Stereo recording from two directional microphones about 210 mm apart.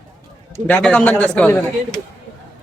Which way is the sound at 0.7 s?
5° left (ahead or behind).